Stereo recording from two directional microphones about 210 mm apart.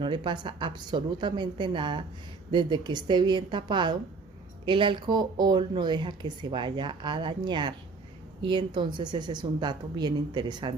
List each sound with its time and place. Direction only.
0.0 s speech: 20° right (ahead or behind)